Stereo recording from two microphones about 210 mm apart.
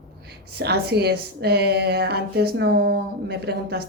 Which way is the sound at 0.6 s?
50° right (ahead or behind).